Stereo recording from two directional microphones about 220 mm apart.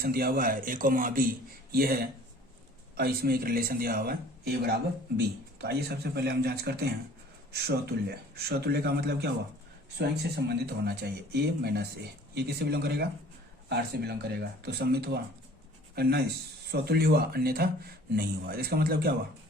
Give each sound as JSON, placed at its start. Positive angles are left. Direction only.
{"t": 0.0, "sound": "a man's voice", "side_deg": -45}